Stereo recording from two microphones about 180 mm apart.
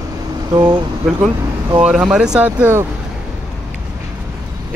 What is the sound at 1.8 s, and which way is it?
Speech, 5° right (ahead or behind).